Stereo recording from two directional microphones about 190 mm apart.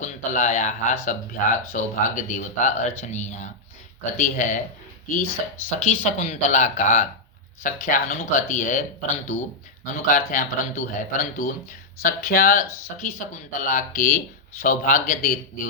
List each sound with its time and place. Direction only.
0.0 s speech: 40° left (ahead or behind)